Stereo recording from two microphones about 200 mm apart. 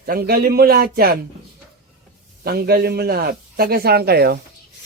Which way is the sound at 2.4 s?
50° right (ahead or behind).